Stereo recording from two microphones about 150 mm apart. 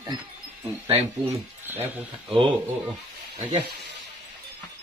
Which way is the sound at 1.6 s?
15° right (ahead or behind).